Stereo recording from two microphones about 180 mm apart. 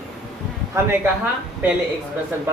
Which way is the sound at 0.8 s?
15° right (ahead or behind).